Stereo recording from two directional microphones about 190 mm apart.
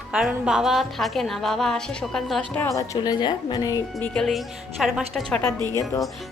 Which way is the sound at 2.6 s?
15° left (ahead or behind).